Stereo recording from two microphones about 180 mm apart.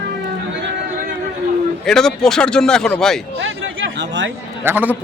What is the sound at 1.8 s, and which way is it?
A man's voice, 5° left (ahead or behind).